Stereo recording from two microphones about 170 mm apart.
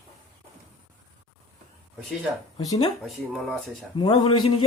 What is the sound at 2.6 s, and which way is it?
Speech, 20° left (ahead or behind).